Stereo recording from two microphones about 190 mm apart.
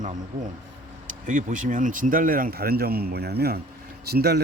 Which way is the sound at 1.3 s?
45° right (ahead or behind).